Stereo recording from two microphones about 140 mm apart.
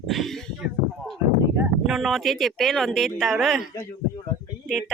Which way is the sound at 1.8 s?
Centre (ahead or behind).